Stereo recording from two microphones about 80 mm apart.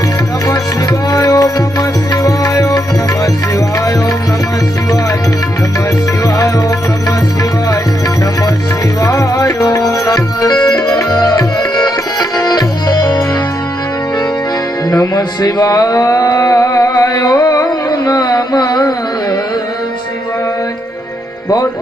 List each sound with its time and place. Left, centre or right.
1.1 s music: left
6.2 s music: left
9.0 s music: left
14.8 s music: left